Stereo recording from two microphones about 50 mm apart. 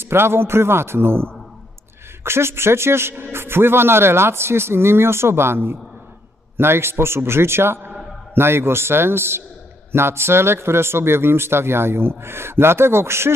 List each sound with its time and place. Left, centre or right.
0.0 s a man's voice: right